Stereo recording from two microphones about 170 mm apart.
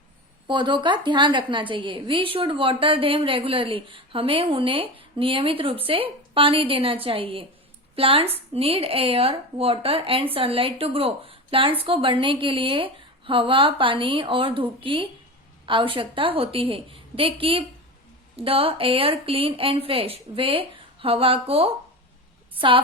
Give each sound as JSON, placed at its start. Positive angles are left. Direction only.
{"t": 0.4, "sound": "a woman's voice", "side_deg": -30}